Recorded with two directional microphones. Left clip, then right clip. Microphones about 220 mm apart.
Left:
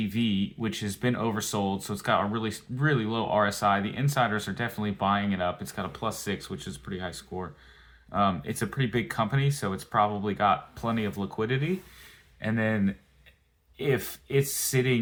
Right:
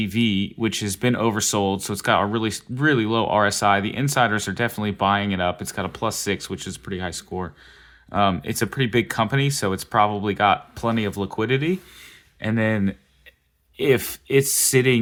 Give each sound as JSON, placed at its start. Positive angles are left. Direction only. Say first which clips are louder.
{"t": 0.0, "sound": "speech", "louder": "right 7 dB", "side_deg": -45}